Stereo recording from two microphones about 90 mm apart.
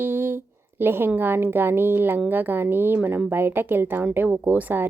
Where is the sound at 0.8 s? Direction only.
25° right (ahead or behind).